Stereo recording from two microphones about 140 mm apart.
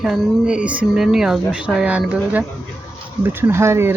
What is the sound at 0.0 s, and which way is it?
Speech, 5° right (ahead or behind).